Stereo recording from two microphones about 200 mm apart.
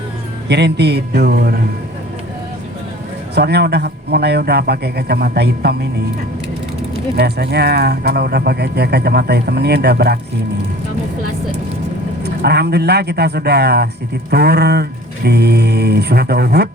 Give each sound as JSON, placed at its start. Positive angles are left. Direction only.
{"t": 0.4, "sound": "a man's voice", "side_deg": -55}
{"t": 3.3, "sound": "speech", "side_deg": -55}
{"t": 7.2, "sound": "speech", "side_deg": -55}
{"t": 12.2, "sound": "a man's voice", "side_deg": -55}